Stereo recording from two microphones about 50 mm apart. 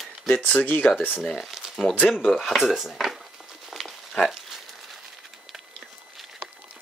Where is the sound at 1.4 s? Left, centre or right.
Centre.